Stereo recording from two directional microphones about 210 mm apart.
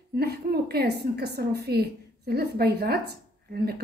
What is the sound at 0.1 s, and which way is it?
A woman's voice, 50° right (ahead or behind).